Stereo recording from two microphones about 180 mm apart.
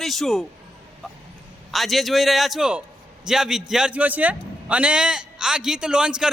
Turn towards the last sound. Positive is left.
turn(degrees=-5)  # may be behind; listen again after turning